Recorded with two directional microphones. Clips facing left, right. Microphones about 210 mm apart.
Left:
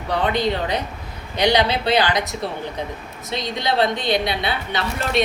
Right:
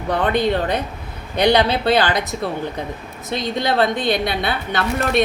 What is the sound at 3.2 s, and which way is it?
A woman's voice, 50° right (ahead or behind).